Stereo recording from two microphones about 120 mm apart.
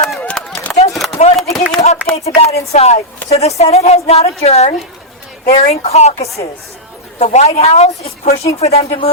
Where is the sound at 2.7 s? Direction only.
60° left (ahead or behind).